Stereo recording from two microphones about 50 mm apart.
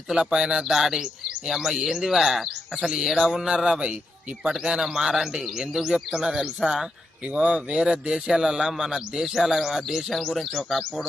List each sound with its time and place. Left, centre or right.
0.1 s speech: centre
7.3 s speech: right; by 11.0 s centre